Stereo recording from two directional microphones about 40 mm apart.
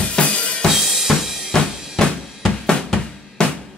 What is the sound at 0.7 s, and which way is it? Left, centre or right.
Drum, centre.